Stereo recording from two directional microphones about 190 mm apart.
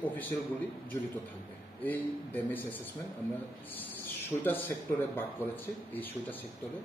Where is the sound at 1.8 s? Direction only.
10° left (ahead or behind).